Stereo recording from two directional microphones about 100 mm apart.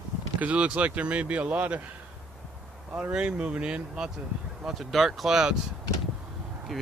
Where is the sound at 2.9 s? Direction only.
10° right (ahead or behind).